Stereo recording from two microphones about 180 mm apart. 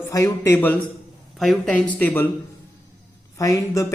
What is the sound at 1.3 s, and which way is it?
Speech, centre (ahead or behind).